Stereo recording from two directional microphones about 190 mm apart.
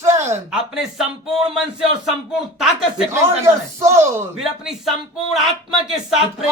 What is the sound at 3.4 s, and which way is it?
Speech, 15° right (ahead or behind).